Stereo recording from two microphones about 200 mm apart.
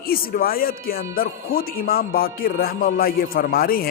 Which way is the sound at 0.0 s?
45° left (ahead or behind).